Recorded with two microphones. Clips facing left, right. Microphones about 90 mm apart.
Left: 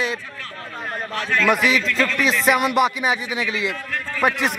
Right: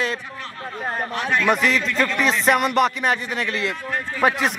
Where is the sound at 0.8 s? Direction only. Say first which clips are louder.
Right 2 dB; 20° right (ahead or behind).